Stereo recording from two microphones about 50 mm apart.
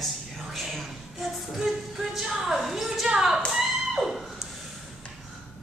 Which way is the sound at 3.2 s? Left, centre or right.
Centre.